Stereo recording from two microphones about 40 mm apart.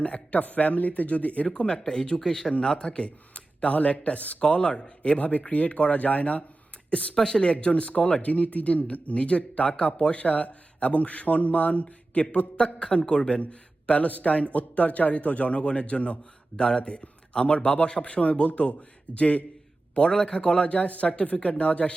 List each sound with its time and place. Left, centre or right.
0.0 s speech: left
1.5 s a man's voice: left
7.2 s speech: centre
7.5 s a man's voice: left
19.9 s a man's voice: left